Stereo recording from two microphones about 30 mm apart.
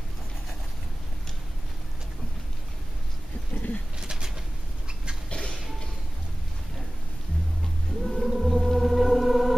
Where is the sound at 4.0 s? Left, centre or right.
Right.